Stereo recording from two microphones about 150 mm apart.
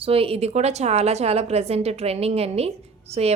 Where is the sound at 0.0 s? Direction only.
40° right (ahead or behind).